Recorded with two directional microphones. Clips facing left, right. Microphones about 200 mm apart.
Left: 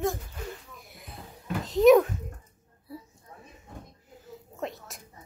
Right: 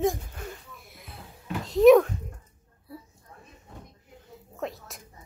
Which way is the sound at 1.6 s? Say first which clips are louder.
Right 2 dB; centre (ahead or behind).